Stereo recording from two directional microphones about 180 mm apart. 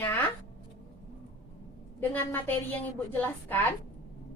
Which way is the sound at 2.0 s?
10° left (ahead or behind).